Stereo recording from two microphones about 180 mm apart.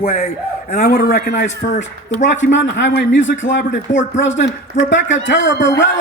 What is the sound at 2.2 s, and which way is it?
A man's voice, 90° left.